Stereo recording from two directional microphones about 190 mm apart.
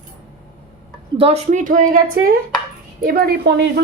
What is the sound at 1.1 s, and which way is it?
A woman's voice, 30° right (ahead or behind).